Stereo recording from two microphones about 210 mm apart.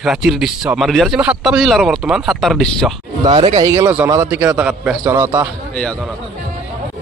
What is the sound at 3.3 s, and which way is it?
Speech, 25° right (ahead or behind).